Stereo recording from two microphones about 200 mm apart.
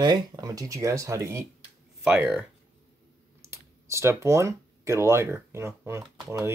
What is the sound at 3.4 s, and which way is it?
Speech, 15° right (ahead or behind).